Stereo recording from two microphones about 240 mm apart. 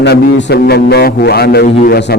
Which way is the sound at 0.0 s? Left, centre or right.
Left.